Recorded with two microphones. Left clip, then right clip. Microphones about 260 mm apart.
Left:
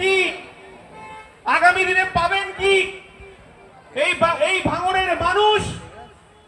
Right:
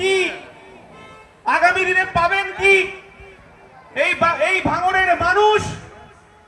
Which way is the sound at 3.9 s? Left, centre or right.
Right.